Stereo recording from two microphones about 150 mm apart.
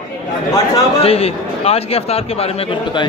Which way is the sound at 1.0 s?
40° left (ahead or behind).